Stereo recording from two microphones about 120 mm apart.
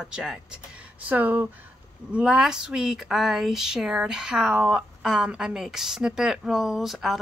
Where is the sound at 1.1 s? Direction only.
15° right (ahead or behind).